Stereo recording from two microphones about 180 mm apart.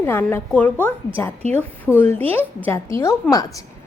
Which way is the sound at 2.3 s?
10° left (ahead or behind).